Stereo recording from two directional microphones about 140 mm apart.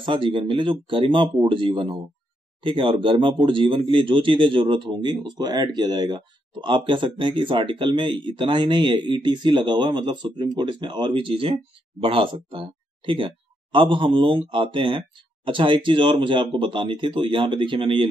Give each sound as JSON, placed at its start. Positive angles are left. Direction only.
{"t": 0.0, "sound": "speech", "side_deg": -35}